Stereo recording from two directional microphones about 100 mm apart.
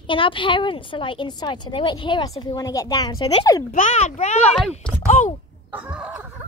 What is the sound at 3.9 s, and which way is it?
Speech, 90° left.